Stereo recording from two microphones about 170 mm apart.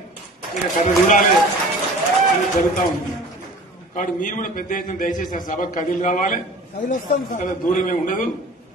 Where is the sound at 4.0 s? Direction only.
50° left (ahead or behind).